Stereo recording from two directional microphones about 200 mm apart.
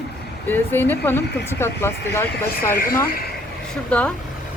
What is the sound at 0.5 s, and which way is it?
Speech, 10° left (ahead or behind).